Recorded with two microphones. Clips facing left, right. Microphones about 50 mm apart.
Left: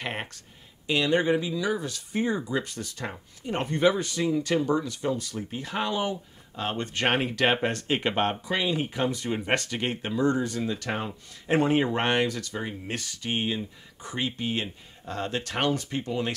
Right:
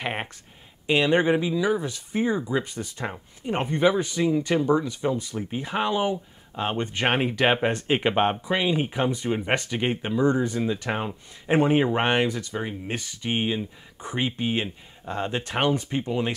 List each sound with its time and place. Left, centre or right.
0.0 s speech: centre
2.1 s speech: centre